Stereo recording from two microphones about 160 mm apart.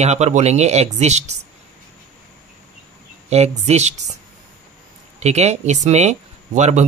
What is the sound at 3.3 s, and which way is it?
Speech, 45° right (ahead or behind).